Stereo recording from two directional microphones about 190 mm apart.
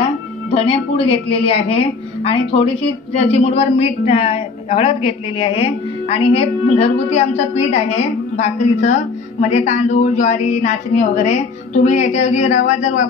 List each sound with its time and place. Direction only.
0.6 s a woman's voice: 30° left (ahead or behind)